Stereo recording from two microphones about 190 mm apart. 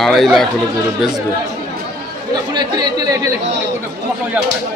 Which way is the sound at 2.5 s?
20° right (ahead or behind).